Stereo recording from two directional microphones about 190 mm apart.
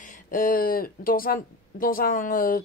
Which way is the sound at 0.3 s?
45° left (ahead or behind).